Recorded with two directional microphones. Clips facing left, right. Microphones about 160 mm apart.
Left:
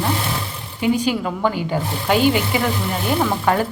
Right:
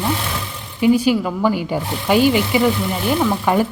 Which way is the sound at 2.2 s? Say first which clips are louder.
Right 2 dB; 45° left (ahead or behind).